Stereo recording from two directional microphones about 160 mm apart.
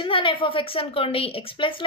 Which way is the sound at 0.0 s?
30° left (ahead or behind).